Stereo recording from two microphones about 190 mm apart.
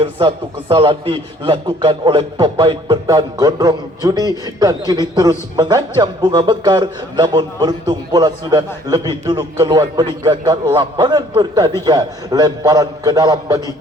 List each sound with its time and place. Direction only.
0.0 s a man's voice: 25° right (ahead or behind)